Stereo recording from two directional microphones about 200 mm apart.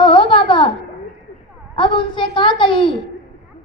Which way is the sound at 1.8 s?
25° left (ahead or behind).